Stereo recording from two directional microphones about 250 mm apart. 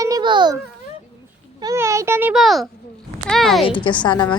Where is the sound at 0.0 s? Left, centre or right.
Centre.